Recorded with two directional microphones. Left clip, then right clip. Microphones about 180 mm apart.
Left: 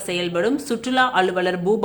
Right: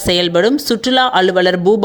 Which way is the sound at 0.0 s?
40° right (ahead or behind).